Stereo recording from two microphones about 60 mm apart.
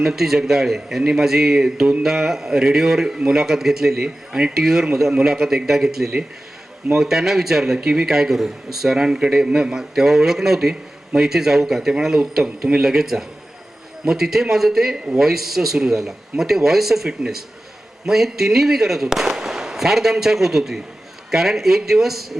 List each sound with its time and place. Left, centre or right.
0.0 s a man's voice: centre